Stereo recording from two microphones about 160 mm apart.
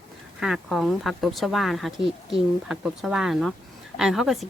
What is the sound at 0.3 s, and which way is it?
Speech, 5° right (ahead or behind).